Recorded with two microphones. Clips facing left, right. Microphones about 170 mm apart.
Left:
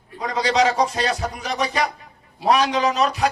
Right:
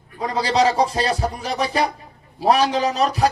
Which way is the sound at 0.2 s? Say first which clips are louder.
Right 1 dB; 30° right (ahead or behind).